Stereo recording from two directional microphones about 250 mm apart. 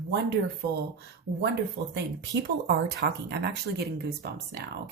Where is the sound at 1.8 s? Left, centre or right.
Right.